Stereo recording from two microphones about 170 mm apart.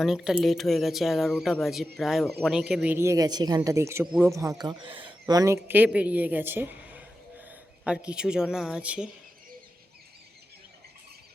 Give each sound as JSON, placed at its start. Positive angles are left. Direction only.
{"t": 0.0, "sound": "speech", "side_deg": -5}
{"t": 5.2, "sound": "speech", "side_deg": -20}